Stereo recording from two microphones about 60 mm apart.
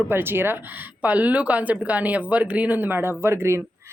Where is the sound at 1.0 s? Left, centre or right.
Right.